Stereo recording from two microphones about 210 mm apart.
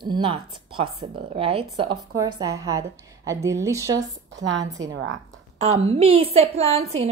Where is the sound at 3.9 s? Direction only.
60° right (ahead or behind).